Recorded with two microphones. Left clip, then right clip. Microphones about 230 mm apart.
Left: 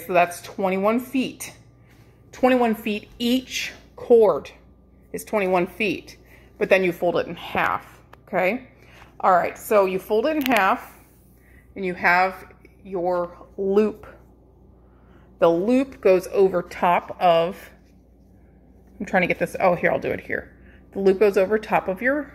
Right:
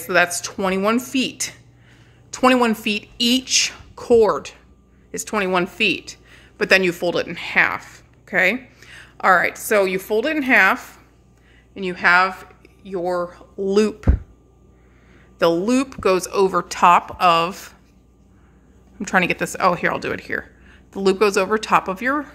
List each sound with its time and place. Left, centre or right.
0.0 s a woman's voice: centre
2.3 s speech: centre
8.3 s a sound: centre
9.9 s speech: centre
11.7 s a woman's voice: centre
12.8 s a woman's voice: centre
13.1 s speech: right
15.3 s speech: centre
18.9 s speech: centre